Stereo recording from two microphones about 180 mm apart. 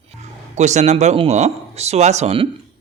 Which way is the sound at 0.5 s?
40° right (ahead or behind).